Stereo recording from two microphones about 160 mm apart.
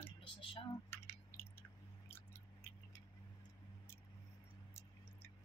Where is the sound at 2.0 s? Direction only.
15° left (ahead or behind).